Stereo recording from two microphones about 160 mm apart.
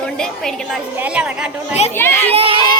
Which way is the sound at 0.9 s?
10° right (ahead or behind).